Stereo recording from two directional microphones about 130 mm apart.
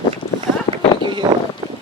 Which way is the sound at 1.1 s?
35° right (ahead or behind).